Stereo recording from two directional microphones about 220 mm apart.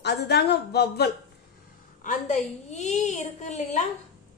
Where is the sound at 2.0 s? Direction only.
35° left (ahead or behind).